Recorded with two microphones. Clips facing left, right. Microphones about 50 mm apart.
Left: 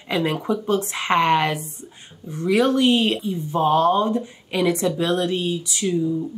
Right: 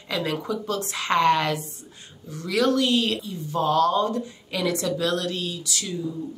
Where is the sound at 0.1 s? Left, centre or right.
Left.